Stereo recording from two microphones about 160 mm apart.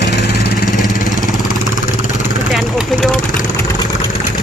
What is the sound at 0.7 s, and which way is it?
Vehicle, centre (ahead or behind).